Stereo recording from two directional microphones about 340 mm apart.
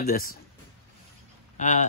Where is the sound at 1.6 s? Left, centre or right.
Left.